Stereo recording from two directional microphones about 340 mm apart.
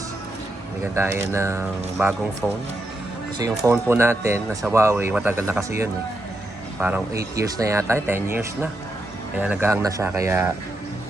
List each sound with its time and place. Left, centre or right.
0.9 s speech: centre